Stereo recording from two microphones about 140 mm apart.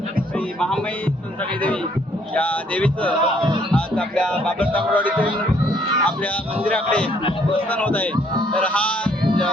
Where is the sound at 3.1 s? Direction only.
35° right (ahead or behind).